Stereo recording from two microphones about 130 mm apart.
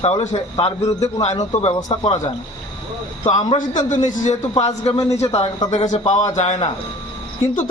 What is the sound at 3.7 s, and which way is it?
Speech, 70° left (ahead or behind).